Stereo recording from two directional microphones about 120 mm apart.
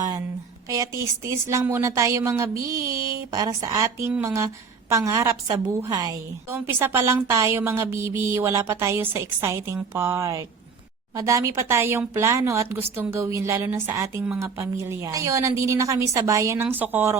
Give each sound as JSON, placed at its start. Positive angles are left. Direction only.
{"t": 0.7, "sound": "a woman's voice", "side_deg": -25}